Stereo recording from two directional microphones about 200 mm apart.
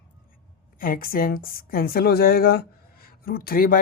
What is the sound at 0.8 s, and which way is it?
A woman's voice, 45° left (ahead or behind).